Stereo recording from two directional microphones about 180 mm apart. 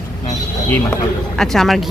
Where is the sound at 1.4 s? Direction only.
Centre (ahead or behind).